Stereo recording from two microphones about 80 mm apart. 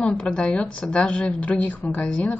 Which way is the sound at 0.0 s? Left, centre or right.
Centre.